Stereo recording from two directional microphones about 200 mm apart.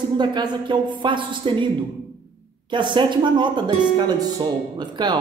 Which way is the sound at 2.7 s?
25° right (ahead or behind).